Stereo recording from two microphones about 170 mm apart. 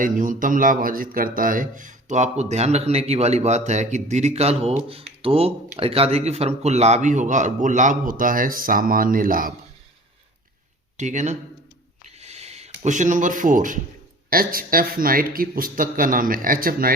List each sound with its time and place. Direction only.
0.0 s speech: 50° right (ahead or behind)
10.9 s speech: 45° right (ahead or behind)
12.0 s owl: 40° right (ahead or behind)
12.8 s speech: 45° right (ahead or behind)